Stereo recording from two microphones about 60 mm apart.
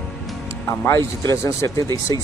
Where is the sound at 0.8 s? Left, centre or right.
Left.